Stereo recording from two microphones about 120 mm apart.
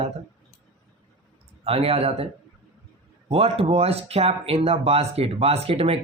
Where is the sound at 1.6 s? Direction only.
55° right (ahead or behind).